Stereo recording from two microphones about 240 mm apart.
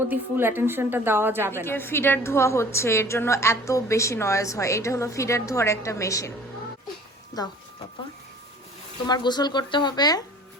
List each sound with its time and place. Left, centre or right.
0.1 s a woman's voice: centre
1.6 s a woman's voice: centre
7.4 s a woman's voice: centre
9.0 s a woman's voice: centre